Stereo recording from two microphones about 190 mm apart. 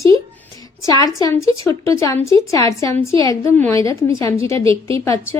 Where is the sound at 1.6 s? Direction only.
15° left (ahead or behind).